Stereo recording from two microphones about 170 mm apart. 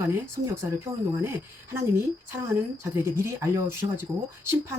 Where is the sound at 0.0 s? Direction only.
20° right (ahead or behind).